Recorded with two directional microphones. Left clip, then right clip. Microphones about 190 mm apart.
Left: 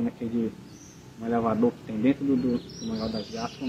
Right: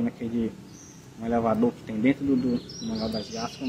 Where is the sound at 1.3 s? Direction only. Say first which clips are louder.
Right 1 dB; 25° right (ahead or behind).